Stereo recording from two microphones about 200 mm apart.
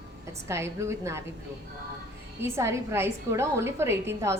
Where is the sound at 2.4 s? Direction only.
15° right (ahead or behind).